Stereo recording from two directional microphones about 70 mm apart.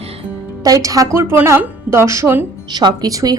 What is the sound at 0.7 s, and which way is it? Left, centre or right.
Speech, right.